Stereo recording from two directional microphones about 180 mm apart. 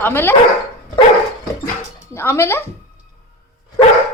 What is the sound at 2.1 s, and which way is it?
Speech, 15° left (ahead or behind).